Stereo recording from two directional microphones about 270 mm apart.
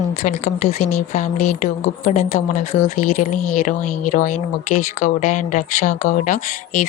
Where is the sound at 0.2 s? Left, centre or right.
Left.